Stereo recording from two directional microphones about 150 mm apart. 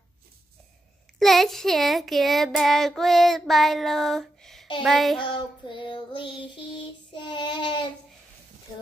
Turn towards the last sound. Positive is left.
turn(degrees=30)  # may be behind; listen again after turning